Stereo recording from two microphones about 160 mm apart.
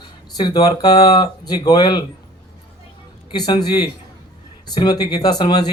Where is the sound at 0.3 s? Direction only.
25° left (ahead or behind).